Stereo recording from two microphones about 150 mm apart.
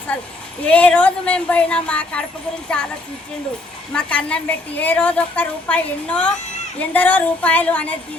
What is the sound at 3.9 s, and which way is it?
A woman's voice, 10° left (ahead or behind).